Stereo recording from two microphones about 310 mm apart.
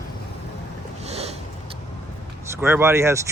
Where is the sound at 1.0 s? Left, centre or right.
Right.